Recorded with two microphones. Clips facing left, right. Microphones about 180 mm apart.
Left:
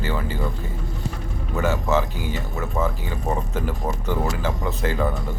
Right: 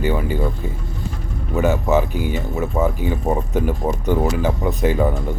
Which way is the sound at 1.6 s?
15° right (ahead or behind).